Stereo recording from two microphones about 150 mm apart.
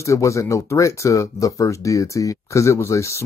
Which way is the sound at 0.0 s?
20° left (ahead or behind).